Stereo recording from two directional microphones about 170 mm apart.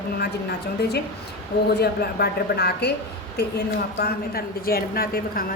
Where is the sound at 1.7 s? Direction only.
70° left (ahead or behind).